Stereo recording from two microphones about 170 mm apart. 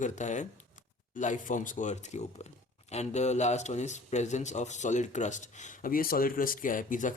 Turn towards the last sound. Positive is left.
turn(degrees=50)  # may be behind; listen again after turning